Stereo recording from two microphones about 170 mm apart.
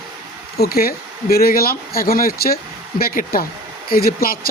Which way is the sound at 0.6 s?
60° left (ahead or behind).